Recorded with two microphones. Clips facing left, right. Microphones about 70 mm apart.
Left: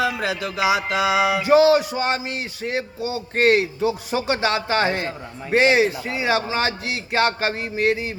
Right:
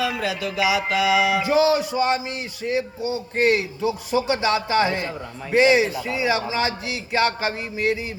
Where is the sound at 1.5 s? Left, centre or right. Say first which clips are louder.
Left 5 dB; left.